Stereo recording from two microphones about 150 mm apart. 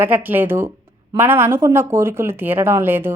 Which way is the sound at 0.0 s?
10° right (ahead or behind).